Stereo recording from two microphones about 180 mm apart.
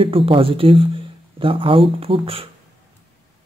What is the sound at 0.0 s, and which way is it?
Speech, 30° right (ahead or behind).